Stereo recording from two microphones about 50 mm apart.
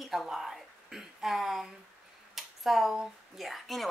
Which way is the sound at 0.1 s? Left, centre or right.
Centre.